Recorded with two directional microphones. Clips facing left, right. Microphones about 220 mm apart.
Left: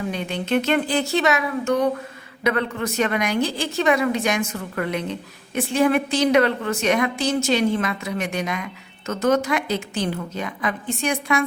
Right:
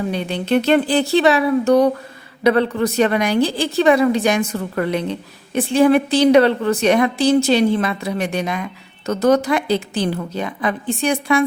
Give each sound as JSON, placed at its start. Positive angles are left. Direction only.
{"t": 0.1, "sound": "a woman's voice", "side_deg": -35}